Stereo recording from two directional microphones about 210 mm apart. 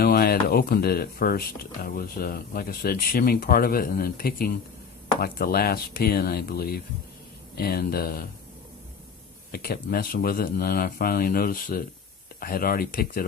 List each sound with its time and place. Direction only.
0.0 s speech: 45° left (ahead or behind)
9.5 s speech: 45° left (ahead or behind)